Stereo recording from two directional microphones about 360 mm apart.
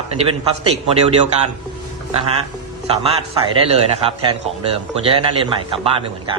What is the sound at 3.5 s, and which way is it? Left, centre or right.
Speech, centre.